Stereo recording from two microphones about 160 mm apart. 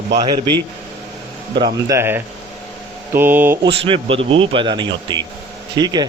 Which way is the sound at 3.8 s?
35° right (ahead or behind).